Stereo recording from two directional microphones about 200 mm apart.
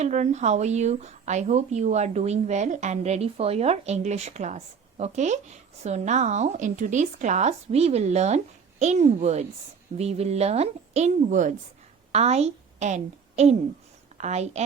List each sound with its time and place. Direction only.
0.0 s a woman's voice: 35° right (ahead or behind)